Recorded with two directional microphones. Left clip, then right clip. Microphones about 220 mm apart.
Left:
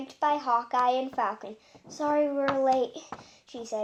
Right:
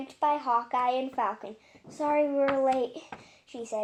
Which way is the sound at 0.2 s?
20° left (ahead or behind).